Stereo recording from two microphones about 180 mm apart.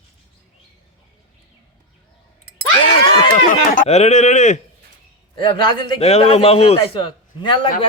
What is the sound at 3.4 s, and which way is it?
Speech, 45° left (ahead or behind).